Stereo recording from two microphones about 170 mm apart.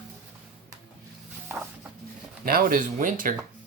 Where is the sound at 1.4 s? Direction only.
10° right (ahead or behind).